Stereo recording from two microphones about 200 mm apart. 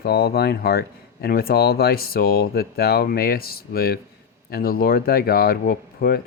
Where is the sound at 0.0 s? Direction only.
50° left (ahead or behind).